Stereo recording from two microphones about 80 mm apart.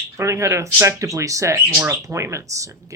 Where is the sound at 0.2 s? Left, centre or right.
Right.